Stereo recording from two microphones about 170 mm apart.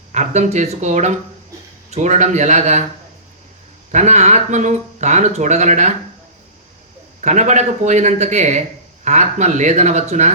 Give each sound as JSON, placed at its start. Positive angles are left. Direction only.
{"t": 0.1, "sound": "speech", "side_deg": -45}
{"t": 3.9, "sound": "speech", "side_deg": -40}
{"t": 7.2, "sound": "speech", "side_deg": -45}